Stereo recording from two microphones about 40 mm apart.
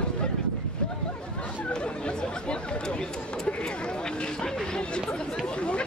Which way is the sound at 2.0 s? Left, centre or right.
Left.